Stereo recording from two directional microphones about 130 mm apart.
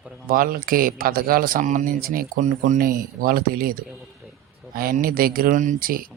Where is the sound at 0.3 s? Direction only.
90° right.